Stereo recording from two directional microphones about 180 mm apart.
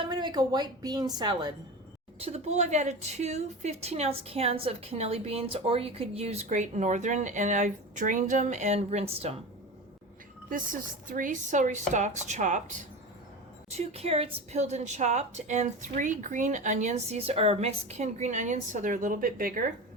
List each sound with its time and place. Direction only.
0.0 s a woman's voice: 25° right (ahead or behind)
2.1 s a woman's voice: 35° right (ahead or behind)
10.5 s a woman's voice: 50° right (ahead or behind)